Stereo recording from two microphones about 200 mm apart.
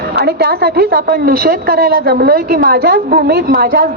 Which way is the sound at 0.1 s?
55° right (ahead or behind).